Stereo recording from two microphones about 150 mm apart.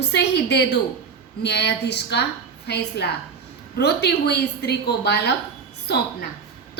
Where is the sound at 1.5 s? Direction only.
90° left.